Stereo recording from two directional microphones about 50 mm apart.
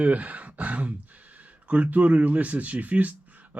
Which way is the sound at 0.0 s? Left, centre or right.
Right.